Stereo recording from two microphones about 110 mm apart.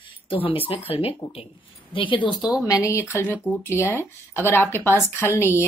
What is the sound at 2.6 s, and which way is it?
A woman's voice, 30° left (ahead or behind).